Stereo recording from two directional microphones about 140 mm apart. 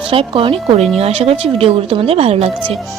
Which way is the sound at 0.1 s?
40° right (ahead or behind).